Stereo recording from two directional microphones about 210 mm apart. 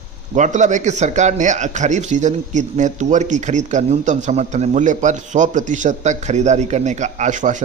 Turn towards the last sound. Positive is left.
turn(degrees=-35)  # may be behind; listen again after turning